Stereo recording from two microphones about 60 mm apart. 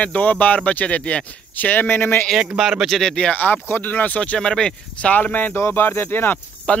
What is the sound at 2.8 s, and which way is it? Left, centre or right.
Speech, centre.